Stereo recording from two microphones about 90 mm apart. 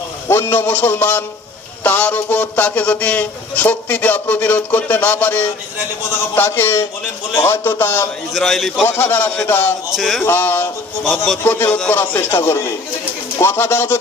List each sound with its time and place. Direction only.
0.3 s speech: 25° left (ahead or behind)
8.3 s a man's voice: centre (ahead or behind)
8.9 s speech: 25° left (ahead or behind)
9.9 s a man's voice: centre (ahead or behind)
10.2 s speech: 25° left (ahead or behind)
11.0 s a man's voice: centre (ahead or behind)
11.4 s speech: 25° left (ahead or behind)